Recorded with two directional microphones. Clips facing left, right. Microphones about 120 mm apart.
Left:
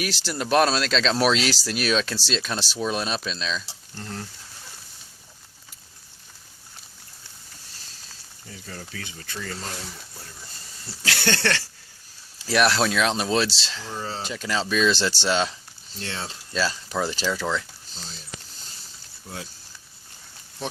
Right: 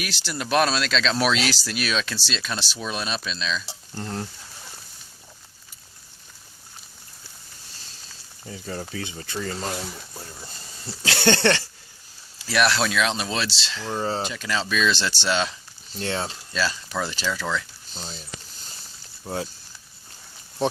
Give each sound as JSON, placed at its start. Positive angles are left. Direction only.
{"t": 0.0, "sound": "speech", "side_deg": 35}
{"t": 3.9, "sound": "frying", "side_deg": -35}
{"t": 8.4, "sound": "speech", "side_deg": -30}
{"t": 10.4, "sound": "a sound", "side_deg": -25}
{"t": 12.5, "sound": "speech", "side_deg": 35}
{"t": 13.9, "sound": "frying", "side_deg": -35}
{"t": 14.3, "sound": "speech", "side_deg": 30}
{"t": 16.0, "sound": "frying", "side_deg": -35}
{"t": 16.6, "sound": "speech", "side_deg": 35}